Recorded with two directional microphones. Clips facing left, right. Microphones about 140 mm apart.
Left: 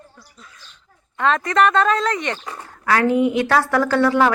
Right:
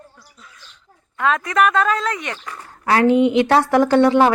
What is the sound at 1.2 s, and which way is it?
Speech, 5° right (ahead or behind).